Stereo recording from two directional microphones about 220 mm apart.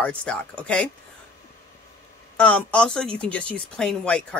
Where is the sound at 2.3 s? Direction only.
5° left (ahead or behind).